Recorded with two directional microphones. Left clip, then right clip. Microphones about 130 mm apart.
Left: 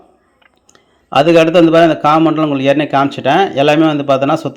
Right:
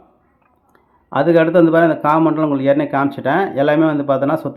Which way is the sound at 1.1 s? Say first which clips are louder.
Left 4 dB; 15° left (ahead or behind).